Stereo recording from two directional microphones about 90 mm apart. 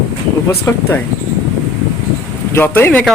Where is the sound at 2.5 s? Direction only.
25° left (ahead or behind).